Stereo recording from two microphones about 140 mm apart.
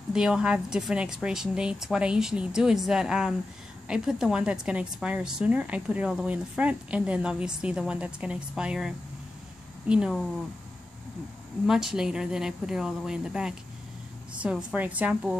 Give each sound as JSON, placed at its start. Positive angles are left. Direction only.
{"t": 0.1, "sound": "a woman's voice", "side_deg": -5}
{"t": 11.6, "sound": "a woman's voice", "side_deg": -5}